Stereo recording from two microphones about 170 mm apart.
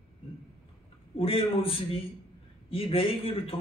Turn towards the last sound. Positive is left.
turn(degrees=35)  # may be behind; listen again after turning